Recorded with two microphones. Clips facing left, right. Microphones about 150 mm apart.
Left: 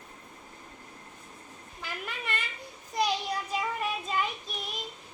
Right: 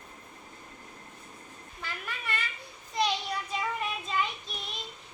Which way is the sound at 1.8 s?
15° left (ahead or behind).